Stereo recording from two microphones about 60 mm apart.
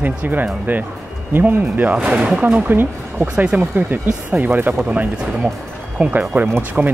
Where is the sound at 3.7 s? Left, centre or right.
Right.